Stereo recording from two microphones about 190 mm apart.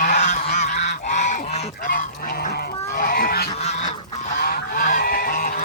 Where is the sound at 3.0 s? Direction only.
50° left (ahead or behind).